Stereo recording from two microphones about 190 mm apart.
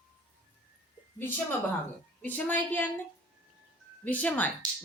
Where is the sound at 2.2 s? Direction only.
10° left (ahead or behind).